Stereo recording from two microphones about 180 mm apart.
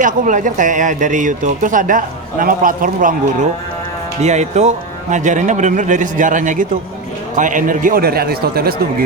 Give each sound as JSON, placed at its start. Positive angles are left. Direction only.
{"t": 0.0, "sound": "a man's voice", "side_deg": -45}
{"t": 4.2, "sound": "a man's voice", "side_deg": -40}